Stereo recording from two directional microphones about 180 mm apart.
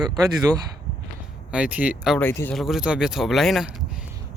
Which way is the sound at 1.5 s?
5° right (ahead or behind).